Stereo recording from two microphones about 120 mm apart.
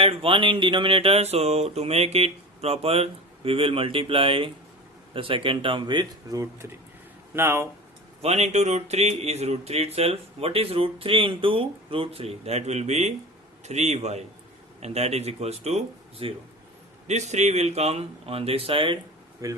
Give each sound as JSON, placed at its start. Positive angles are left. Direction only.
{"t": 0.0, "sound": "speech", "side_deg": -50}
{"t": 6.3, "sound": "speech", "side_deg": -25}
{"t": 8.2, "sound": "speech", "side_deg": -65}
{"t": 17.1, "sound": "speech", "side_deg": -70}
{"t": 19.4, "sound": "speech", "side_deg": -30}